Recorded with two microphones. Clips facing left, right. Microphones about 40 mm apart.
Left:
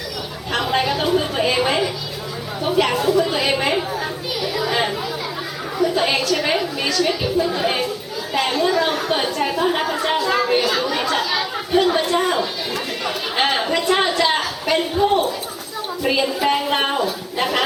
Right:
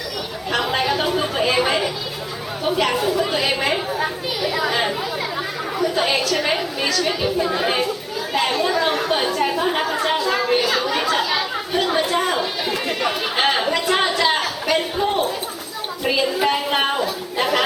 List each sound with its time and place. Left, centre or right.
0.5 s chatter: centre
2.6 s a sound: centre
3.9 s children playing: centre
4.7 s chatter: centre
5.8 s a sound: centre
7.3 s chatter: centre
12.7 s chatter: centre
13.3 s a sound: centre
16.0 s a woman's voice: centre